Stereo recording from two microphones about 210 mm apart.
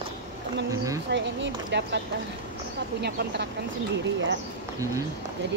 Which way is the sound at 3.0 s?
55° right (ahead or behind).